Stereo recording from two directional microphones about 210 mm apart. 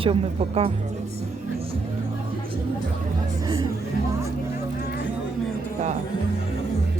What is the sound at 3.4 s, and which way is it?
Speech, 20° right (ahead or behind).